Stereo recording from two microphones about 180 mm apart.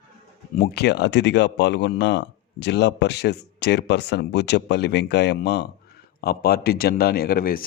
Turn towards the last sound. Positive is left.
turn(degrees=55)  # may be behind; listen again after turning